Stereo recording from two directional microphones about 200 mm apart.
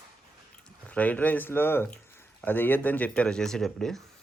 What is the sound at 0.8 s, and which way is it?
Speech, 5° left (ahead or behind).